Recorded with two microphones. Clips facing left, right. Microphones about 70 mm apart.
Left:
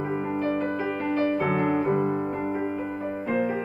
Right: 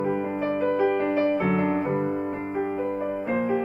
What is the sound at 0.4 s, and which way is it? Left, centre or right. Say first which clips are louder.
Music: right 5 dB; right.